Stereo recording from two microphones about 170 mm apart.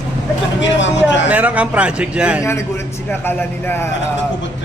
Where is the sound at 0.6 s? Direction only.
90° left.